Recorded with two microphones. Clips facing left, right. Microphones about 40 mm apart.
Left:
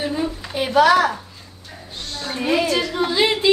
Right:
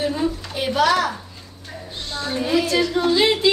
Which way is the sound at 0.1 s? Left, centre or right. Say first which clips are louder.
Right 1 dB; centre.